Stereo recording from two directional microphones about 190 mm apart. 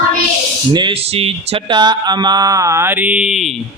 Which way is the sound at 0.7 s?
25° right (ahead or behind).